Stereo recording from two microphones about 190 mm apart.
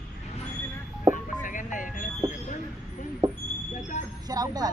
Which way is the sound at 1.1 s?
45° left (ahead or behind).